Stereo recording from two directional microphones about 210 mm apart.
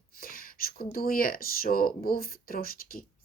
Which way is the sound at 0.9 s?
45° left (ahead or behind).